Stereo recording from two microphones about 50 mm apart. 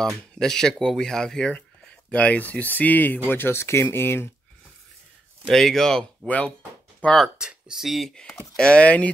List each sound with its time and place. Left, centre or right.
0.0 s speech: centre
2.0 s speech: left
3.3 s speech: left
5.5 s speech: centre
6.2 s speech: left
7.3 s speech: centre
8.5 s speech: centre